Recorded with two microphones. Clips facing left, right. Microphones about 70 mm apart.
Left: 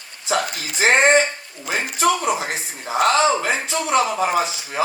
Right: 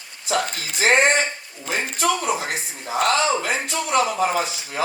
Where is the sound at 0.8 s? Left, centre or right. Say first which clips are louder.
Left 3 dB; left.